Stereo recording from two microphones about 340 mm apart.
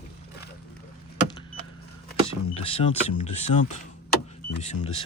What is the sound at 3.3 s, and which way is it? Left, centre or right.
Speech, centre.